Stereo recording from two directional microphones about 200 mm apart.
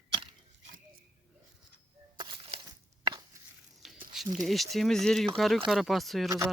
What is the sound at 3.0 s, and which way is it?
Chop, 20° right (ahead or behind).